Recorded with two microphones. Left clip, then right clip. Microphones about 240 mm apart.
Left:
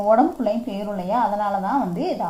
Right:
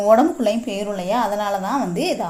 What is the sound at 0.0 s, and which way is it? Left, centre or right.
A woman's voice, right.